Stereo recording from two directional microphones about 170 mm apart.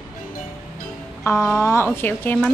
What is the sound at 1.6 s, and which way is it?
Speech, 15° left (ahead or behind).